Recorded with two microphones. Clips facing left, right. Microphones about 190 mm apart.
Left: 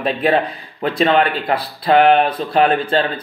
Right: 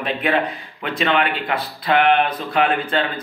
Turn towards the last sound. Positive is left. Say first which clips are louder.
# left 4 dB
turn(degrees=35)  # may be behind; listen again after turning